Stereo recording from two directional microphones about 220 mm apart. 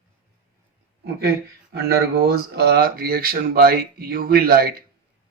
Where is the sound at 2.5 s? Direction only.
45° right (ahead or behind).